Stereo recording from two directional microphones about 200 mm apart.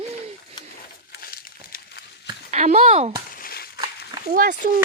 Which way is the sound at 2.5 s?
35° right (ahead or behind).